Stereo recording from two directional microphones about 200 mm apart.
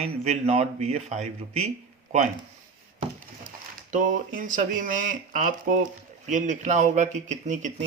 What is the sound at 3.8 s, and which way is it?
Speech, 40° right (ahead or behind).